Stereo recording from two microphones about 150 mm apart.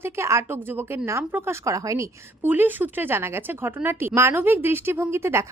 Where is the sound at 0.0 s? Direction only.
20° right (ahead or behind).